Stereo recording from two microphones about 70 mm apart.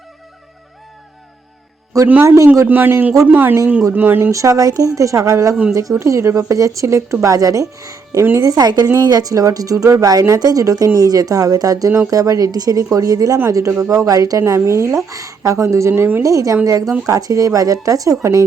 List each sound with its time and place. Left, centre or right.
2.2 s a woman's voice: right
2.6 s speech: right
4.3 s a woman's voice: right
16.2 s a woman's voice: right